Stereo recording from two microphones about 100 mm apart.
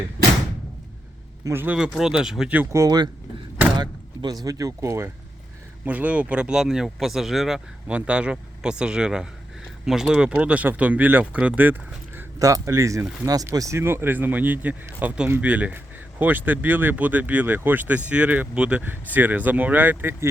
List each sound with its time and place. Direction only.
1.5 s speech: 20° right (ahead or behind)
1.7 s speech: 10° right (ahead or behind)
2.8 s speech: 45° right (ahead or behind); by 5.1 s 25° right (ahead or behind)
5.8 s speech: 15° right (ahead or behind)
12.4 s speech: 35° right (ahead or behind)